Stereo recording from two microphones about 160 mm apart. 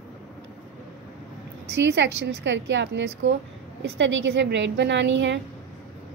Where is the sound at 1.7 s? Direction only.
90° right.